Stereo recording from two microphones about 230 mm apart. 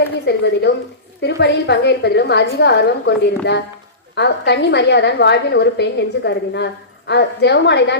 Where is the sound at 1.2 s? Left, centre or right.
Left.